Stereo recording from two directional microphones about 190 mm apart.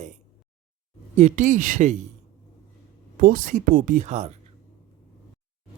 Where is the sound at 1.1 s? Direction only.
35° right (ahead or behind).